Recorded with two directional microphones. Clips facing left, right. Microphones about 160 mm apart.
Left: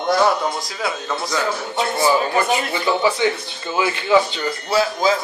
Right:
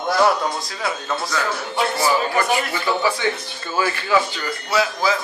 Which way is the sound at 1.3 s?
20° left (ahead or behind).